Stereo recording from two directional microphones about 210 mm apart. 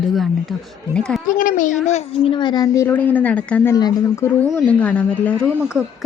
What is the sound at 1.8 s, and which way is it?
A woman's voice, 30° left (ahead or behind).